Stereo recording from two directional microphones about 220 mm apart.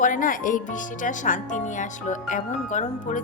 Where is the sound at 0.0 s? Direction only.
35° left (ahead or behind).